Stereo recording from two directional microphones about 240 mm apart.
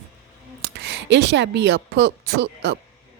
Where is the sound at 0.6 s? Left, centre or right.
Right.